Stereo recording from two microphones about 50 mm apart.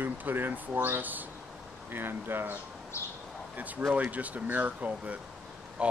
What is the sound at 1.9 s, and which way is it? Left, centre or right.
Speech, right.